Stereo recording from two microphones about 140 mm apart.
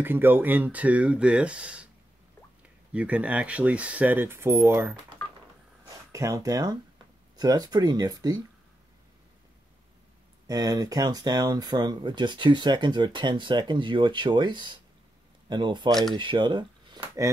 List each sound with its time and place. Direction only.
0.0 s speech: 15° right (ahead or behind)
2.9 s speech: 10° right (ahead or behind)
6.1 s speech: 25° right (ahead or behind)
10.4 s speech: 25° right (ahead or behind)
15.9 s speech: centre (ahead or behind)
16.2 s speech: 35° right (ahead or behind)
17.0 s speech: 20° right (ahead or behind)